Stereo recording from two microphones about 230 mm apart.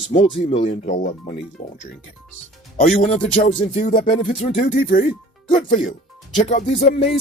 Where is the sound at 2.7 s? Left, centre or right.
Left.